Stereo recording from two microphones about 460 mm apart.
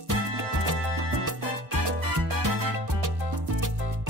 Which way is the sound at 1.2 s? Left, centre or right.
Right.